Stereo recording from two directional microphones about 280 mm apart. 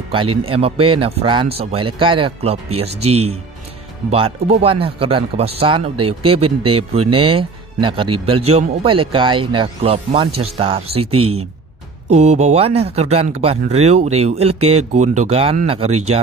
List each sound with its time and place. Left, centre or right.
0.1 s a man's voice: centre